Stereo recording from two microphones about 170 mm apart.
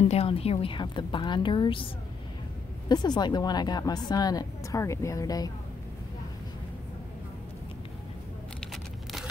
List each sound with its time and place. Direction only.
0.0 s a woman's voice: 35° left (ahead or behind)
2.9 s a woman's voice: 25° left (ahead or behind)